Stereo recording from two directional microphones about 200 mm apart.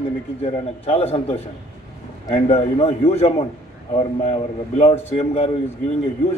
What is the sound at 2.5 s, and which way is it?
Speech, 30° left (ahead or behind).